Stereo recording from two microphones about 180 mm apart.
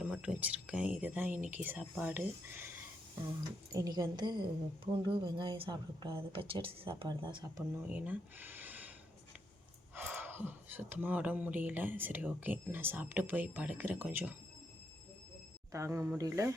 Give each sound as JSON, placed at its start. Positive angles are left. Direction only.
{"t": 0.0, "sound": "speech", "side_deg": -5}
{"t": 3.7, "sound": "speech", "side_deg": -20}
{"t": 7.9, "sound": "speech", "side_deg": -10}
{"t": 9.9, "sound": "speech", "side_deg": -10}
{"t": 15.7, "sound": "speech", "side_deg": -15}